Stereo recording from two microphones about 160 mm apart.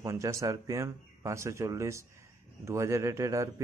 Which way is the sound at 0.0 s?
20° right (ahead or behind).